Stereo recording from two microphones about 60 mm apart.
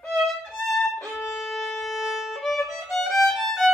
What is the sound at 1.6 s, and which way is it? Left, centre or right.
Violin, centre.